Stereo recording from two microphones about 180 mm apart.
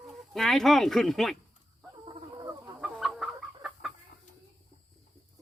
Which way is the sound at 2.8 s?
Centre (ahead or behind).